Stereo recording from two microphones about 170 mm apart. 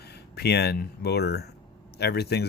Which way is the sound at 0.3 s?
75° left (ahead or behind).